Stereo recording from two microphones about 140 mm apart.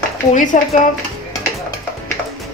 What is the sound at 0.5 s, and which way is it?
Speech, 60° left (ahead or behind).